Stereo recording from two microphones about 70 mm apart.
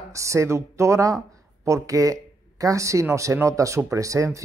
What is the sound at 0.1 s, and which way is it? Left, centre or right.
Speech, right.